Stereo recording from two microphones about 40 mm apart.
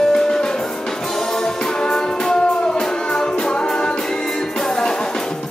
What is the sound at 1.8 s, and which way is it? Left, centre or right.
Music, centre.